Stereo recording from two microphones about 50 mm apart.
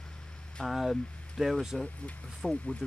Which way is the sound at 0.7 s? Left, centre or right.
Centre.